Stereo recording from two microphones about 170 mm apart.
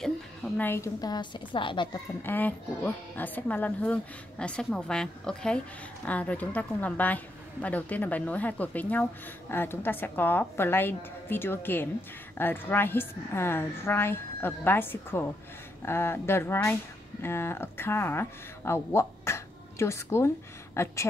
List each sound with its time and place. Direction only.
0.6 s a woman's voice: 15° left (ahead or behind)
2.2 s speech: 10° left (ahead or behind)